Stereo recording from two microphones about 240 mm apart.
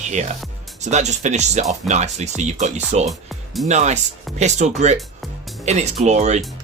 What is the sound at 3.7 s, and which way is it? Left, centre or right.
Speech, right.